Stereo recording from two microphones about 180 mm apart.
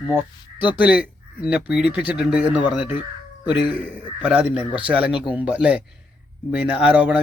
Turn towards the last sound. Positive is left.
turn(degrees=-5)  # may be behind; listen again after turning